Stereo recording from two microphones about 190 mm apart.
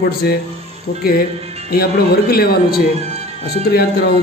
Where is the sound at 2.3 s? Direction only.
55° left (ahead or behind).